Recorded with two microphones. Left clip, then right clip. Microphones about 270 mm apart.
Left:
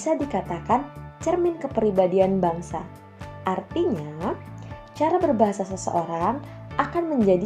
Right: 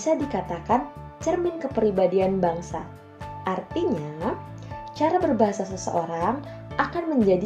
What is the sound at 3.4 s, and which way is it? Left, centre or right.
Speech, left.